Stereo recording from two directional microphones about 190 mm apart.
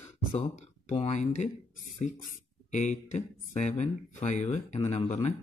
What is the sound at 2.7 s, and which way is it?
Speech, 40° left (ahead or behind).